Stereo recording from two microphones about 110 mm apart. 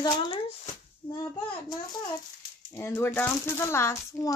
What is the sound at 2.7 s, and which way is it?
Speech, 25° left (ahead or behind).